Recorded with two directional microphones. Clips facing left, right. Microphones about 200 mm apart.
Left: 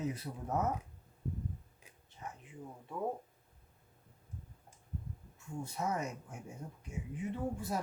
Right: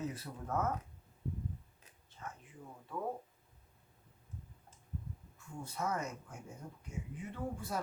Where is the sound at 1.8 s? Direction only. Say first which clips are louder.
Left 2 dB; 15° left (ahead or behind).